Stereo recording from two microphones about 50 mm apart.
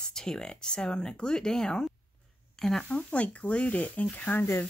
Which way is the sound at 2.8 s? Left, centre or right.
Left.